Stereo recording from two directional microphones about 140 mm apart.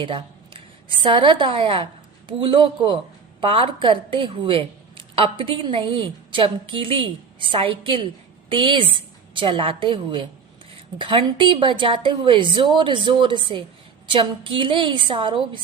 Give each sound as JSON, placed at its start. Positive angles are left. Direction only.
{"t": 0.0, "sound": "a woman's voice", "side_deg": -35}